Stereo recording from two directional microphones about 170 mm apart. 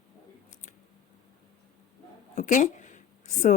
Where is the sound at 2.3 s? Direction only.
50° left (ahead or behind).